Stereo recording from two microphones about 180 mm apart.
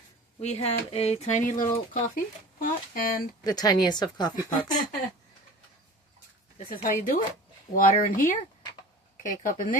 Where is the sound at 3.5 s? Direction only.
20° left (ahead or behind).